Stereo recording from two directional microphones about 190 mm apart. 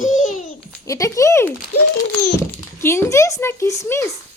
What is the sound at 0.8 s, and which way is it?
Speech, 15° left (ahead or behind).